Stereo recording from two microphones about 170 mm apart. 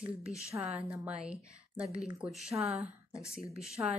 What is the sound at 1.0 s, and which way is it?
Speech, 5° right (ahead or behind).